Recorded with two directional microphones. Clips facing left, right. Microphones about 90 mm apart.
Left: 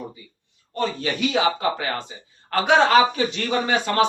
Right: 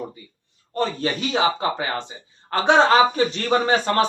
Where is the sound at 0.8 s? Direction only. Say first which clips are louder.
Even; 35° right (ahead or behind).